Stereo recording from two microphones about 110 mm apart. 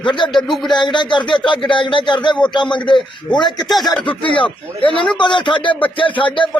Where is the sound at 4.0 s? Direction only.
50° left (ahead or behind).